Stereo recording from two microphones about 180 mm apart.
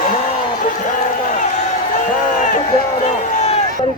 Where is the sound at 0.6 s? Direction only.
45° left (ahead or behind).